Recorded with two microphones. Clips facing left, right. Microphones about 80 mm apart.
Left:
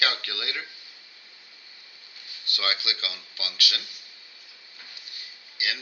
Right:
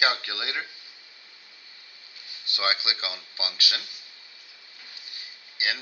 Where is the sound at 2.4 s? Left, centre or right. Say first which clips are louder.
Right 2 dB; right.